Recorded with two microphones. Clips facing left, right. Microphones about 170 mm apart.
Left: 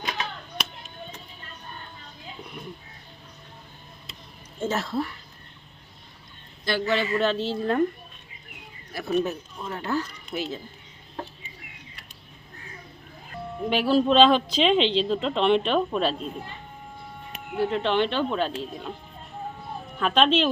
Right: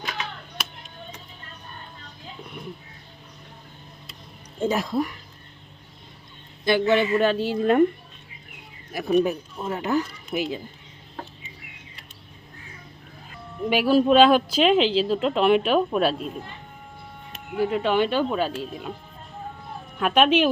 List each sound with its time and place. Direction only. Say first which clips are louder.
4.6 s speech: right 3 dB; 15° right (ahead or behind)
6.7 s speech: right 5 dB; 20° right (ahead or behind)
8.9 s speech: right 4 dB; 15° right (ahead or behind)
13.7 s speech: right 3 dB; 10° right (ahead or behind)
17.6 s speech: right 2 dB; 10° right (ahead or behind)
20.0 s speech: right 2 dB; 10° right (ahead or behind)